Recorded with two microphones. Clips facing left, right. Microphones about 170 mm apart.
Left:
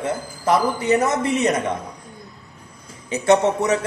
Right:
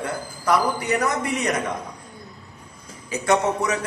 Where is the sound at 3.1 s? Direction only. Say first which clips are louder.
Left 4 dB; 25° left (ahead or behind).